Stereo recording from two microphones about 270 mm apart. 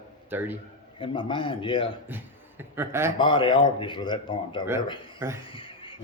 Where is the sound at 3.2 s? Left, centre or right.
Centre.